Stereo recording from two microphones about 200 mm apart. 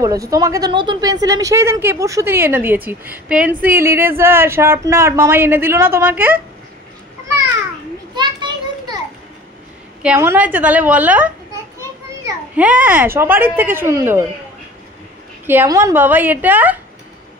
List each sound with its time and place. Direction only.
0.0 s speech: 15° right (ahead or behind)
8.1 s children playing: 20° right (ahead or behind)
10.0 s speech: 10° right (ahead or behind)
12.5 s speech: 5° right (ahead or behind)
15.4 s speech: 10° right (ahead or behind)